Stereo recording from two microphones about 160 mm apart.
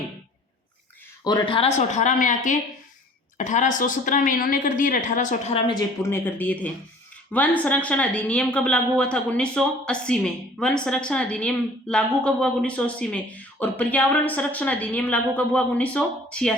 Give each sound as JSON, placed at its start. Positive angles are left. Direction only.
{"t": 1.2, "sound": "a woman's voice", "side_deg": 30}
{"t": 6.0, "sound": "a woman's voice", "side_deg": 15}